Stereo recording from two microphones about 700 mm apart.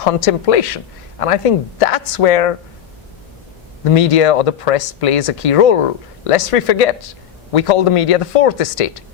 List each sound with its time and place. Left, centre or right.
0.0 s speech: left
3.9 s speech: left